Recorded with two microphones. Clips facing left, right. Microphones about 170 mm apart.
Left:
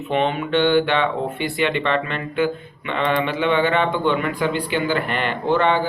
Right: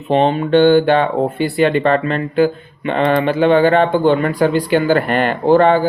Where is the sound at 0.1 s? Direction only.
35° right (ahead or behind).